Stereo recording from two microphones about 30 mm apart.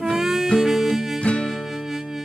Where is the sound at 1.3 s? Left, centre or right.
Left.